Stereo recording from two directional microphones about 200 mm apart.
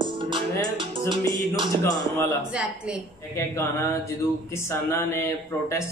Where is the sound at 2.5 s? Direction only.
5° right (ahead or behind).